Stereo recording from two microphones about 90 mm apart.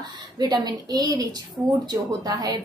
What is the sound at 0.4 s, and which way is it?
A woman's voice, 45° right (ahead or behind).